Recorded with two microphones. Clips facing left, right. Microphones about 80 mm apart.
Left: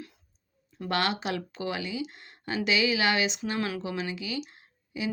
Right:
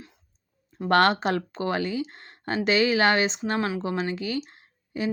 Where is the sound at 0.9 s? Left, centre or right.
Right.